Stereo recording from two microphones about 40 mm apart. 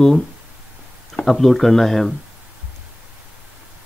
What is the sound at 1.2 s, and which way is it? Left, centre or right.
Speech, centre.